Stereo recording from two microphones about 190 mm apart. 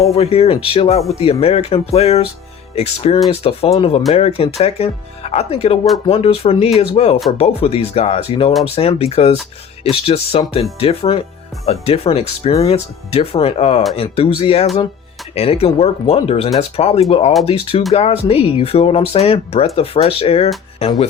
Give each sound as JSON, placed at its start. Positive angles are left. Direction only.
{"t": 0.1, "sound": "speech", "side_deg": 30}